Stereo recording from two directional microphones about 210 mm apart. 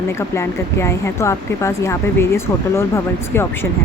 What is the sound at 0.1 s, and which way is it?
Speech, 15° left (ahead or behind).